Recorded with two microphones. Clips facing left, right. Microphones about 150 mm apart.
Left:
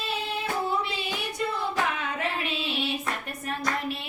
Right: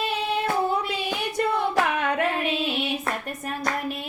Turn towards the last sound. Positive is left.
turn(degrees=-50)  # may be behind; listen again after turning